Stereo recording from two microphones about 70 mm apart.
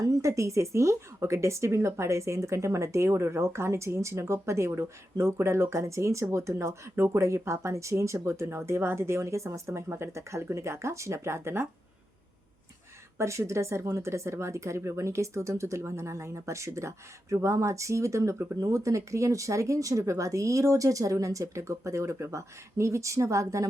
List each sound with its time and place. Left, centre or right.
0.0 s speech: right
13.1 s speech: right